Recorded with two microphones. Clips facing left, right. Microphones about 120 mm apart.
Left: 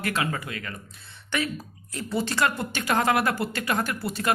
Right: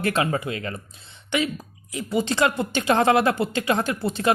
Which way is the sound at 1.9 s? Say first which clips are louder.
Right 4 dB; 15° right (ahead or behind).